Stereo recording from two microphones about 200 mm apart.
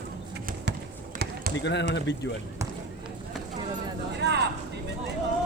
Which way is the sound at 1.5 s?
60° left (ahead or behind).